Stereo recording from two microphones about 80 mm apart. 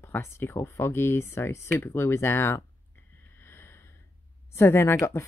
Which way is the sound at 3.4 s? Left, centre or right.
Left.